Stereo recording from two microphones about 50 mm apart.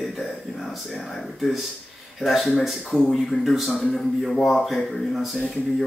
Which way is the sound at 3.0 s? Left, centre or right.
Centre.